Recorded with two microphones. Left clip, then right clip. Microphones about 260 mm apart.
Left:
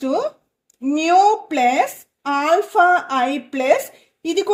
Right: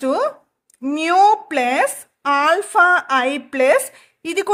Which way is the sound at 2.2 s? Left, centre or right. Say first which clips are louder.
Right 1 dB; right.